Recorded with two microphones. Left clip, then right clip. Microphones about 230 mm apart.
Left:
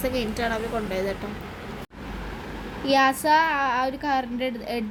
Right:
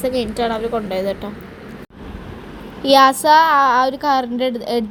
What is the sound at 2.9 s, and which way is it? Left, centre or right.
A woman's voice, right.